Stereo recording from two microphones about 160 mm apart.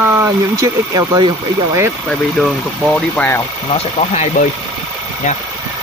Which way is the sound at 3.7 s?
45° left (ahead or behind).